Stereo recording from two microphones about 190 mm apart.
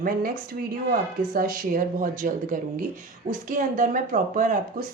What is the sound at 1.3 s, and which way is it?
Speech, 50° right (ahead or behind).